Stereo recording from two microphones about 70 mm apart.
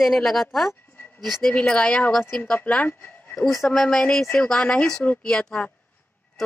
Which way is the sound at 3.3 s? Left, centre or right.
Centre.